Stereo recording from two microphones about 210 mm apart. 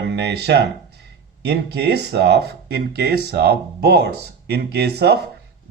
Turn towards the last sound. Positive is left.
turn(degrees=-50)  # may be behind; listen again after turning